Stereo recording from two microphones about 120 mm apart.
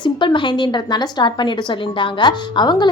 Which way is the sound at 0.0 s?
40° left (ahead or behind).